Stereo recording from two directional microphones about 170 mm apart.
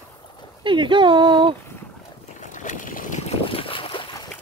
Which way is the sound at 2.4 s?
50° left (ahead or behind).